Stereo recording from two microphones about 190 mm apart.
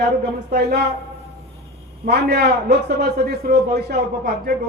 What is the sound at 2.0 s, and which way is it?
Speech, 60° right (ahead or behind).